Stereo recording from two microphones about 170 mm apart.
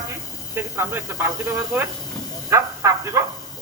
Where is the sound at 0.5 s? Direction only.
15° right (ahead or behind).